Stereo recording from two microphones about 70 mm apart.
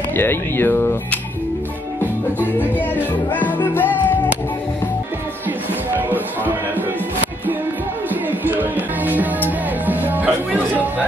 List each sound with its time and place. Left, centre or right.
0.1 s speech: left
3.0 s music: left
5.9 s music: right
8.1 s music: right